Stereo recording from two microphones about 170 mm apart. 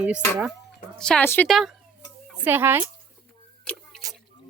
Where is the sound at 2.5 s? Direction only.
10° right (ahead or behind).